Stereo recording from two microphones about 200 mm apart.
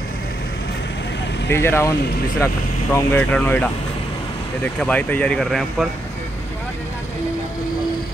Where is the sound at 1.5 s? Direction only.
10° left (ahead or behind).